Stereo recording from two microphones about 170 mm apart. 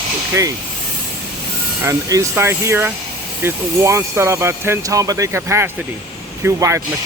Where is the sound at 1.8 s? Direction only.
20° right (ahead or behind).